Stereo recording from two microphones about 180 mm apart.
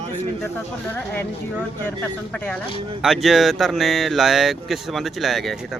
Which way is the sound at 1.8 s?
10° left (ahead or behind).